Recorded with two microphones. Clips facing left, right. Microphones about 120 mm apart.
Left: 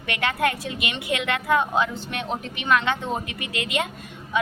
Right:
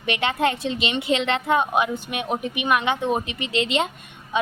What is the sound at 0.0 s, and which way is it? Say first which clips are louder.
A woman's voice: right 2 dB; 20° right (ahead or behind).